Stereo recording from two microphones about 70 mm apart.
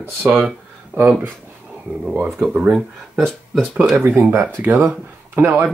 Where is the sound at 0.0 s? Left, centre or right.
Right.